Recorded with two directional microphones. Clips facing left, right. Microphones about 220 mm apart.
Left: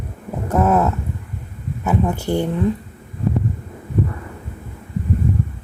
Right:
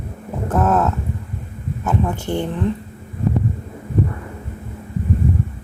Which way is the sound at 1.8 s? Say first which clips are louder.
Left 2 dB; 10° left (ahead or behind).